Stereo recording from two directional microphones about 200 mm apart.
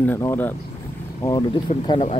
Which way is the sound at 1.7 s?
35° left (ahead or behind).